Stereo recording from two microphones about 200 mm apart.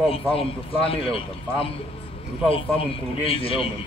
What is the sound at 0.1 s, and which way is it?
A man's voice, 30° left (ahead or behind).